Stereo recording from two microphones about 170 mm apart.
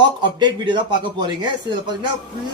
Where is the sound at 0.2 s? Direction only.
25° right (ahead or behind).